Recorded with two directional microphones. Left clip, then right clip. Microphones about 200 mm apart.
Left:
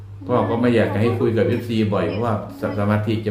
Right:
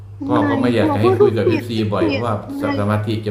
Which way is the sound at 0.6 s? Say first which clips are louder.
Right 3 dB; 10° right (ahead or behind).